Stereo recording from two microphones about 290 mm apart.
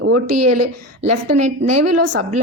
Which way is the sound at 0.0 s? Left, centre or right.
Right.